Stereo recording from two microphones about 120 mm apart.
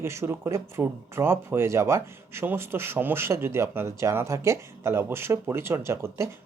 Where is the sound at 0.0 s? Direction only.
20° right (ahead or behind).